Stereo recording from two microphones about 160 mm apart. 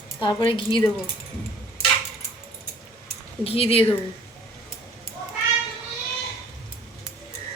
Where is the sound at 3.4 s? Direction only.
35° left (ahead or behind).